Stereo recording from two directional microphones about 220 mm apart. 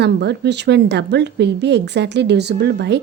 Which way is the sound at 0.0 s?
50° right (ahead or behind).